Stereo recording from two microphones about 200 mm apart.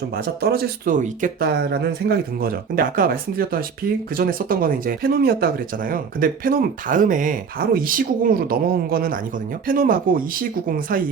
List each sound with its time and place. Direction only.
0.1 s speech: 50° right (ahead or behind)